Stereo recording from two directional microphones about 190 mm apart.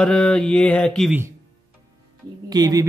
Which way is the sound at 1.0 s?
10° right (ahead or behind).